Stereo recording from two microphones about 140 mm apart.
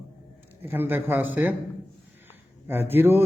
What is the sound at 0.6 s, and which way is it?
Speech, 15° right (ahead or behind).